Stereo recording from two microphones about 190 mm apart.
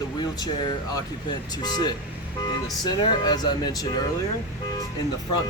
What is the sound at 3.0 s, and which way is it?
Speech, 25° left (ahead or behind).